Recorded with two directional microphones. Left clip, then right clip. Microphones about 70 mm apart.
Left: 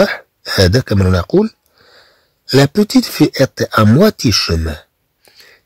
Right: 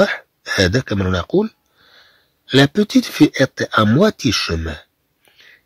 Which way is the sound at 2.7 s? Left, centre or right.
Left.